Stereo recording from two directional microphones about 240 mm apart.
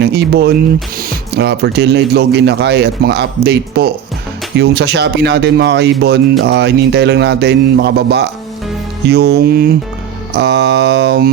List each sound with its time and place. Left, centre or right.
0.0 s a man's voice: right
9.0 s music: right
10.3 s a man's voice: right